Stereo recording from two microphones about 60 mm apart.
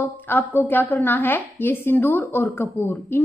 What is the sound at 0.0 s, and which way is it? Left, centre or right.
A woman's voice, left.